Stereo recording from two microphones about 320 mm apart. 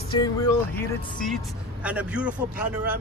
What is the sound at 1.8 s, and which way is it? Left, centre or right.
Speech, centre.